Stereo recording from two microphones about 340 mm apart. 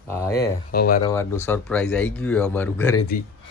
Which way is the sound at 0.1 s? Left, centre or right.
Centre.